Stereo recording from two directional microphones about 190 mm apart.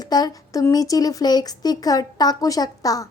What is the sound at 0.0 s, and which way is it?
Speech, 20° left (ahead or behind).